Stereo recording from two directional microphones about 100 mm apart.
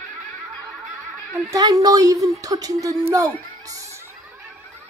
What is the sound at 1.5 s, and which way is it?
A woman's voice, 40° right (ahead or behind).